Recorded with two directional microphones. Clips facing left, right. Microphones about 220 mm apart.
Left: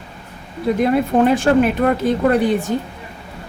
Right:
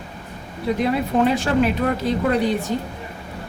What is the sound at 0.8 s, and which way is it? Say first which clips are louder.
Speech: left 4 dB; 50° left (ahead or behind).